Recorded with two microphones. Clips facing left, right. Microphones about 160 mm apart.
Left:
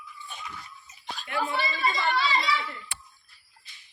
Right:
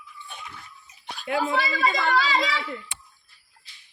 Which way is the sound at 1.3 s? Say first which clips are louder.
Right 4 dB; 90° right.